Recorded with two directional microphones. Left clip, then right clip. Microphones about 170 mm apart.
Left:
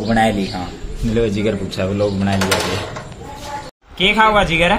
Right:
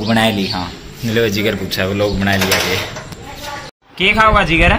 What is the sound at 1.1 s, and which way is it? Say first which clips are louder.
Speech: right 3 dB; 5° left (ahead or behind).